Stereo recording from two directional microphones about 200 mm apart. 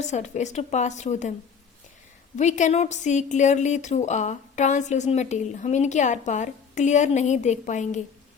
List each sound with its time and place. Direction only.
0.0 s a woman's voice: 35° left (ahead or behind)
2.3 s a woman's voice: 35° left (ahead or behind)